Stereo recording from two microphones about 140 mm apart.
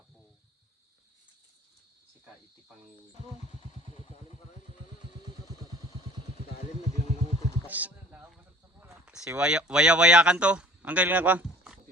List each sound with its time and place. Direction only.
3.9 s motorcycle: 50° left (ahead or behind)
5.7 s vehicle: 45° left (ahead or behind)
7.7 s a sound: 10° right (ahead or behind)
9.1 s a man's voice: 5° right (ahead or behind)